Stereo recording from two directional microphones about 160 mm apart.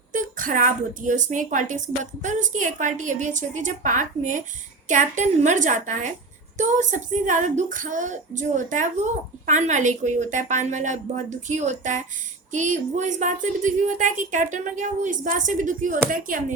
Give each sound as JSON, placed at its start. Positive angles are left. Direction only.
{"t": 0.1, "sound": "speech", "side_deg": -55}